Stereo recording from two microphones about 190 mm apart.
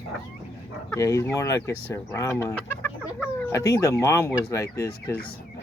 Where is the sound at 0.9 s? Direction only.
15° left (ahead or behind).